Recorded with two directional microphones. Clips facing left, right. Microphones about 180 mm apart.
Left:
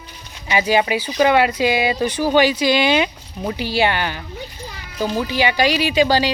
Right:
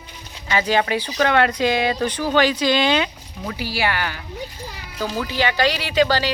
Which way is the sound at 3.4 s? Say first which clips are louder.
Left 5 dB; 25° left (ahead or behind).